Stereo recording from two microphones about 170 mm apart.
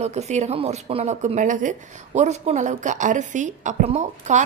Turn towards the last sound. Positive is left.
turn(degrees=-45)  # may be behind; listen again after turning